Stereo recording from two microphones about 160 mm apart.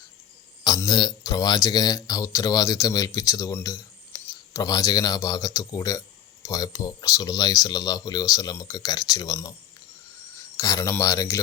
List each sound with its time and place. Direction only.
0.6 s speech: 25° left (ahead or behind)
10.6 s speech: 20° left (ahead or behind)